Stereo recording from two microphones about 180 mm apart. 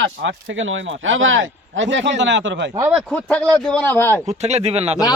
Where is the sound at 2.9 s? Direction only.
5° left (ahead or behind).